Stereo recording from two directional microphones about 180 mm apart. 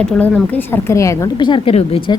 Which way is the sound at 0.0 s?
5° left (ahead or behind).